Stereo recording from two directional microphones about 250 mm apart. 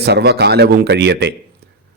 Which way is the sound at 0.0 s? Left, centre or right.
Right.